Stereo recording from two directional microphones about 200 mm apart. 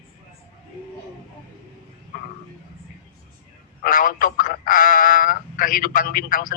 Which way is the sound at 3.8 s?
45° left (ahead or behind).